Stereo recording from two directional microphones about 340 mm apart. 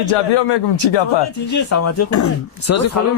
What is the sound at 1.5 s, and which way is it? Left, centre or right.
Speech, left.